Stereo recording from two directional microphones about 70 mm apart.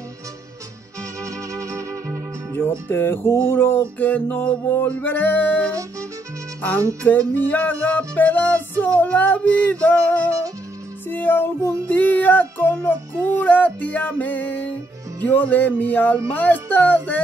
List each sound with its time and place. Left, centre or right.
1.2 s music: right
2.9 s music: left
7.1 s music: left